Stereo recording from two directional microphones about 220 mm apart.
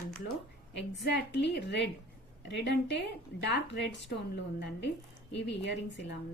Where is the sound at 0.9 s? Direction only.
50° left (ahead or behind).